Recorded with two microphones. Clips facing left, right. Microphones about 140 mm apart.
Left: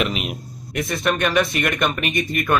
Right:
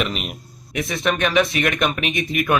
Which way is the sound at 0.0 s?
5° left (ahead or behind).